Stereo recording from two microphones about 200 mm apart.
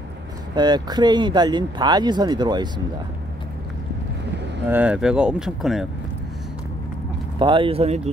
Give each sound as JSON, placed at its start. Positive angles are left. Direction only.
{"t": 0.6, "sound": "speech", "side_deg": -20}
{"t": 4.6, "sound": "speech", "side_deg": -5}
{"t": 7.3, "sound": "speech", "side_deg": -25}